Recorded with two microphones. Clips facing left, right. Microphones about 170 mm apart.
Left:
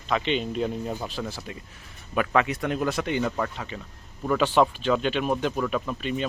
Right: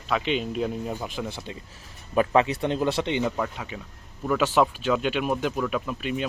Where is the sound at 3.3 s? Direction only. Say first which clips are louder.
Even; 5° right (ahead or behind).